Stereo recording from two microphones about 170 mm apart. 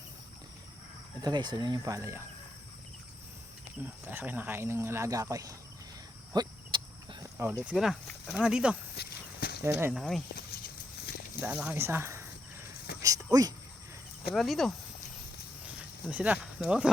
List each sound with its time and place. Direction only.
1.2 s speech: 25° right (ahead or behind)
3.8 s speech: 10° right (ahead or behind)
6.3 s a sound: 25° right (ahead or behind)
7.3 s speech: 15° right (ahead or behind)
9.0 s walk: 70° left (ahead or behind)
9.6 s speech: 15° right (ahead or behind)
9.9 s speech: centre (ahead or behind)
11.3 s speech: 10° right (ahead or behind)
11.8 s cricket: 15° right (ahead or behind)
12.9 s a sound: 65° left (ahead or behind)
14.3 s speech: centre (ahead or behind)
16.0 s speech: 5° right (ahead or behind)